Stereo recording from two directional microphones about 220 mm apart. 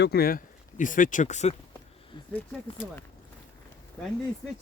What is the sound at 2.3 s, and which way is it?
Speech, 5° left (ahead or behind).